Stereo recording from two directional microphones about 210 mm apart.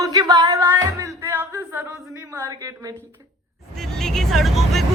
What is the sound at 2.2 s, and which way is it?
Speech, 15° right (ahead or behind).